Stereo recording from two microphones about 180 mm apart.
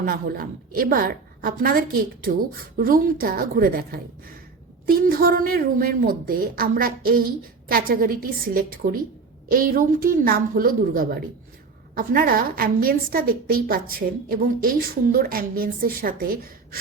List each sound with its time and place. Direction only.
0.0 s a woman's voice: 50° right (ahead or behind)